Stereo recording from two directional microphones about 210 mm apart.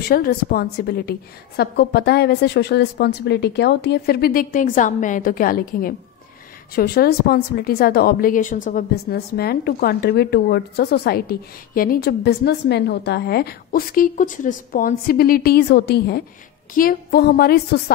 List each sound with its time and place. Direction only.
0.1 s a woman's voice: 45° left (ahead or behind)